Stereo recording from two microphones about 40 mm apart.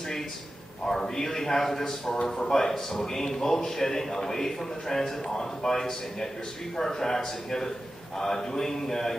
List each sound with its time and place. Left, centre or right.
0.8 s a man's voice: centre